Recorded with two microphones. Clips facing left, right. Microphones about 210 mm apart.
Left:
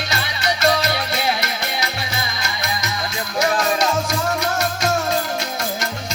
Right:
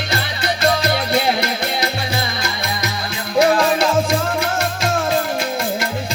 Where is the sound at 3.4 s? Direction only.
55° right (ahead or behind).